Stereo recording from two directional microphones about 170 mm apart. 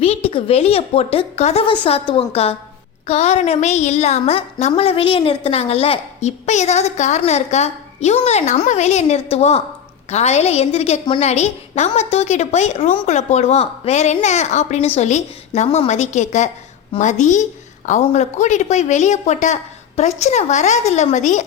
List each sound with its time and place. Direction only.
0.0 s a woman's voice: 35° left (ahead or behind)